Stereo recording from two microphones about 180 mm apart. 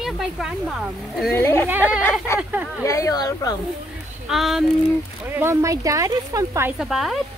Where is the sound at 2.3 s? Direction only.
15° left (ahead or behind).